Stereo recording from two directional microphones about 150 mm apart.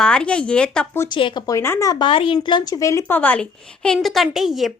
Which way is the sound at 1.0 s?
30° left (ahead or behind).